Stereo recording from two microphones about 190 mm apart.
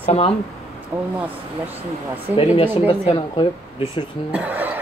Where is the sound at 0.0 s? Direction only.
30° left (ahead or behind).